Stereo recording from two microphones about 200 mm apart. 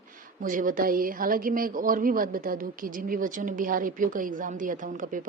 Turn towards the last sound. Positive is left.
turn(degrees=-40)  # may be behind; listen again after turning